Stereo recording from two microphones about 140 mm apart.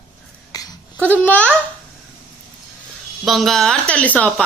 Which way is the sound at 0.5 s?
25° left (ahead or behind).